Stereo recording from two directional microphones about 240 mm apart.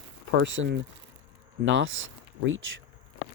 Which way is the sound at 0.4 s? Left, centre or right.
Right.